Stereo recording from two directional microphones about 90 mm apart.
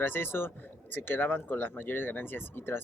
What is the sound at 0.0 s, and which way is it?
Speech, 25° left (ahead or behind).